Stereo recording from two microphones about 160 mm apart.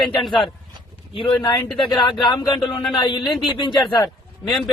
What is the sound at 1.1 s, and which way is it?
A man's voice, 35° left (ahead or behind).